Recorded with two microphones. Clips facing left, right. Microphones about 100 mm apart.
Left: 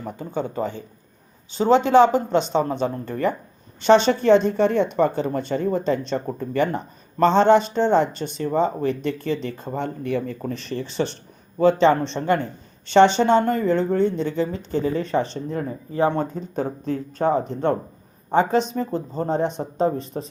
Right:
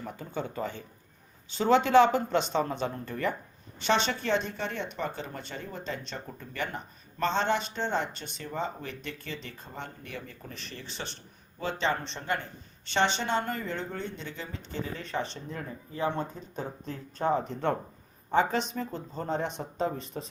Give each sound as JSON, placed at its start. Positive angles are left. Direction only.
{"t": 0.0, "sound": "speech", "side_deg": 30}
{"t": 10.1, "sound": "speech", "side_deg": 70}
{"t": 16.0, "sound": "speech", "side_deg": 60}
{"t": 17.2, "sound": "speech", "side_deg": 35}